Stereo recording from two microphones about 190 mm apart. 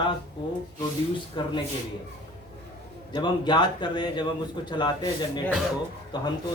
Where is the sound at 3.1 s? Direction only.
25° left (ahead or behind).